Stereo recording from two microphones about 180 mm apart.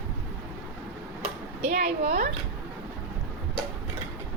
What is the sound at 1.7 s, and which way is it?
Speech, 40° right (ahead or behind).